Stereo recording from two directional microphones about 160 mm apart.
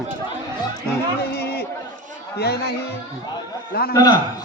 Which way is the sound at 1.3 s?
85° left.